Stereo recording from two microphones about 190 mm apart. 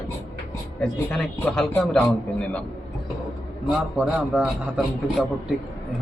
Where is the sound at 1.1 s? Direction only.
5° left (ahead or behind).